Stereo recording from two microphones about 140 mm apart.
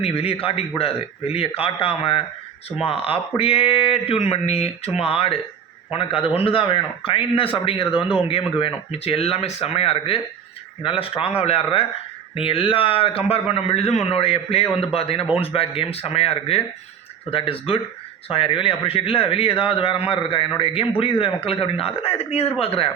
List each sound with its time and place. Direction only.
0.0 s a man's voice: 45° left (ahead or behind)